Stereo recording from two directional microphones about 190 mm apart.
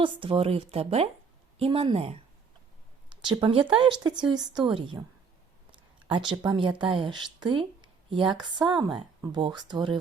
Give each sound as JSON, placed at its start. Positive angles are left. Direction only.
{"t": 0.0, "sound": "speech", "side_deg": -25}
{"t": 3.2, "sound": "speech", "side_deg": -25}
{"t": 6.1, "sound": "speech", "side_deg": -25}